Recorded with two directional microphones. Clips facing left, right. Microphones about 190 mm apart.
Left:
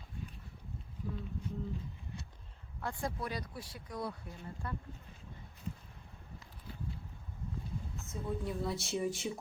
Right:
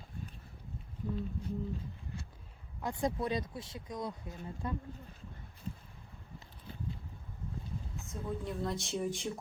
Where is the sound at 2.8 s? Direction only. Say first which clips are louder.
Right 5 dB; 20° right (ahead or behind).